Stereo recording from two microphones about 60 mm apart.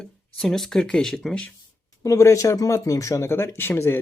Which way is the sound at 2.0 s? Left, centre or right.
Left.